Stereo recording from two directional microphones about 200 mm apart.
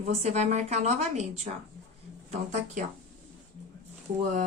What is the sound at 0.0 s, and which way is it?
A woman's voice, 35° right (ahead or behind).